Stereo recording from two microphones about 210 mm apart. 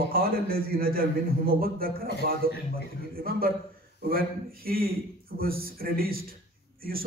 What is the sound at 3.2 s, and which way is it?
A man's voice, 45° right (ahead or behind).